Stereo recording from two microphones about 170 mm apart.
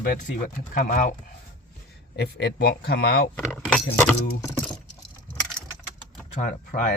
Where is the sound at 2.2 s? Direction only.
90° left; by 3.3 s 70° left (ahead or behind).